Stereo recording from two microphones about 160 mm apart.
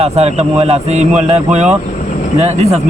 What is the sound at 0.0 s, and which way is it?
A man's voice, 40° right (ahead or behind).